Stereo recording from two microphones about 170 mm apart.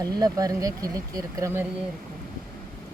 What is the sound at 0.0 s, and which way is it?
Speech, 20° right (ahead or behind).